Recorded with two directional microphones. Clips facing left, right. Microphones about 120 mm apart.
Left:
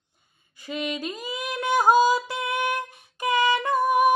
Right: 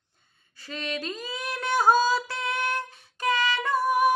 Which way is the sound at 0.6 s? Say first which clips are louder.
Left 3 dB; 15° left (ahead or behind).